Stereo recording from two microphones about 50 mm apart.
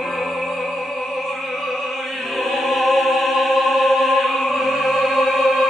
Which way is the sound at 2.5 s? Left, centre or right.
Centre.